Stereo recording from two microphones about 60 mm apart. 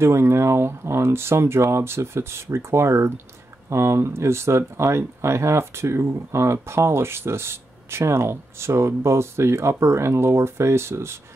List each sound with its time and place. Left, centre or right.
0.0 s speech: right